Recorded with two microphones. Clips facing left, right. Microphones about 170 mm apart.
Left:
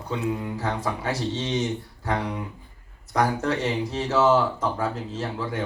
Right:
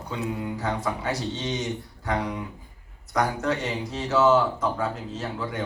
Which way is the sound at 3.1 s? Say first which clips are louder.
Left 1 dB; 30° left (ahead or behind).